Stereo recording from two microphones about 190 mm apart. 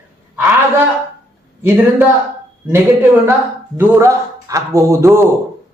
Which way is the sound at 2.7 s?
10° right (ahead or behind).